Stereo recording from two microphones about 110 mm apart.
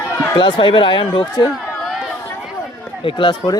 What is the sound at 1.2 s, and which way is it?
Speech, 35° left (ahead or behind).